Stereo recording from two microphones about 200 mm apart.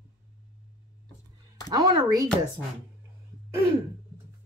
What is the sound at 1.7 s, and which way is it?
Speech, 20° right (ahead or behind).